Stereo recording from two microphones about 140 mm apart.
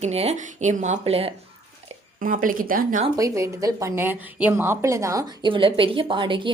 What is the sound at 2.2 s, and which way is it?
Speech, 80° right.